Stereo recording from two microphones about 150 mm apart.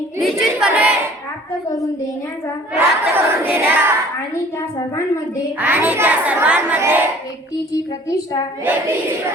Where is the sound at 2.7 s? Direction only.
15° right (ahead or behind).